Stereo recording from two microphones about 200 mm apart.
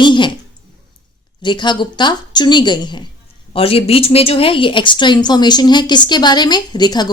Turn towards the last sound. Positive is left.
turn(degrees=20)  # may be behind; listen again after turning